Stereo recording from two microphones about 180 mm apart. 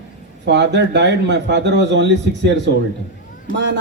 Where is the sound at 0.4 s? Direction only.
75° right (ahead or behind).